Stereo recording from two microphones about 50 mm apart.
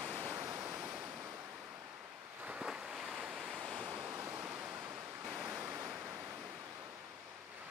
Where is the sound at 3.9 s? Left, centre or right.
Right.